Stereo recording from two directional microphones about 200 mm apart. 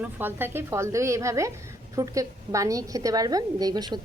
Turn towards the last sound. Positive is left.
turn(degrees=-20)  # may be behind; listen again after turning